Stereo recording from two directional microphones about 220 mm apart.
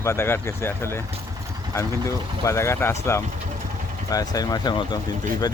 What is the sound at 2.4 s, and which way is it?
Speech, 15° left (ahead or behind).